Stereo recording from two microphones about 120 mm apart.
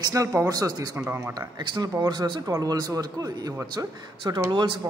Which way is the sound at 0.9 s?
15° right (ahead or behind).